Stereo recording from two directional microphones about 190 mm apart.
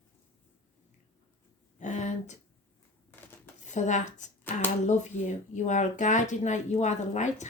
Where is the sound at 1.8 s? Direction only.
40° left (ahead or behind).